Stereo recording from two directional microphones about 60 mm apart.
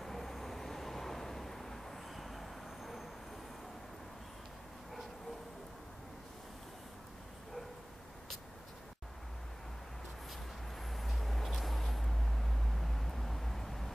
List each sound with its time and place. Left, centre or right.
0.0 s vehicle: centre
10.9 s vehicle: centre